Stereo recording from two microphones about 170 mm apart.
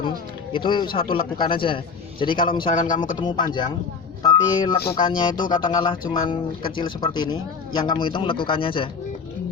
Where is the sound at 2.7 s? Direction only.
50° left (ahead or behind).